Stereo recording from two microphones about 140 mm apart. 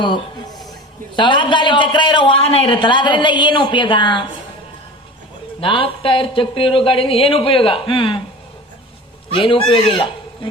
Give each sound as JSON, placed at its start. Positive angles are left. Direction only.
{"t": 1.1, "sound": "a man's voice", "side_deg": 35}
{"t": 5.5, "sound": "a man's voice", "side_deg": 40}
{"t": 9.3, "sound": "a man's voice", "side_deg": 40}